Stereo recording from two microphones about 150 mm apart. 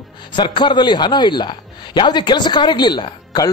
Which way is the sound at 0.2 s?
30° left (ahead or behind).